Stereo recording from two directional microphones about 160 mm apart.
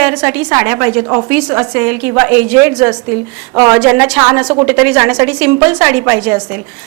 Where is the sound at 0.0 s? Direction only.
5° right (ahead or behind).